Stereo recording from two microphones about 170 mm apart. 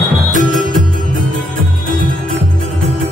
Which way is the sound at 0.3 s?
50° right (ahead or behind).